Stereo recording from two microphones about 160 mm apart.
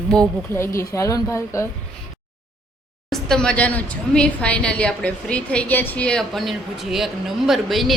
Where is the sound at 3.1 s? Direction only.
5° left (ahead or behind).